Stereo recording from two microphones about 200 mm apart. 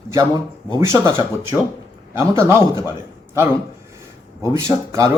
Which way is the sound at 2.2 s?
15° right (ahead or behind).